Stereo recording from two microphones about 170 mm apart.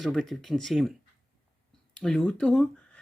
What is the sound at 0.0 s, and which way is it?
Speech, centre (ahead or behind).